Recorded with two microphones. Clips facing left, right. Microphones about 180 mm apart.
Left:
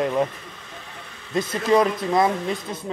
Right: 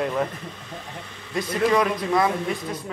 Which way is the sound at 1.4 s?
25° left (ahead or behind).